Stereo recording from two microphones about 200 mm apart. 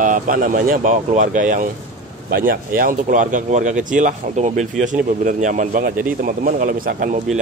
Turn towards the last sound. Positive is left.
turn(degrees=-40)  # may be behind; listen again after turning